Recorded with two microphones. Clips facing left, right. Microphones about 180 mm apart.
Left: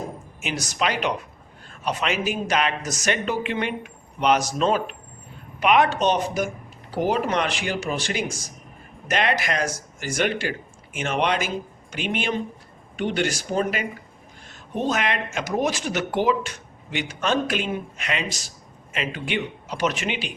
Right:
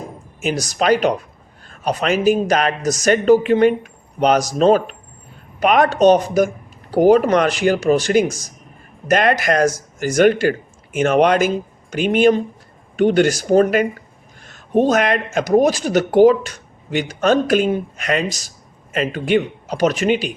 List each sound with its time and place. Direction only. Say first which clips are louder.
0.4 s speech: right 9 dB; 40° right (ahead or behind)